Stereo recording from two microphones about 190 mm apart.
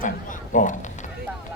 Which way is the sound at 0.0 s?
45° left (ahead or behind).